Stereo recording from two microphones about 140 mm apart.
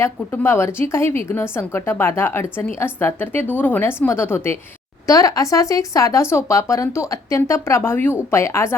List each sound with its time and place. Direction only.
0.0 s a woman's voice: 15° left (ahead or behind)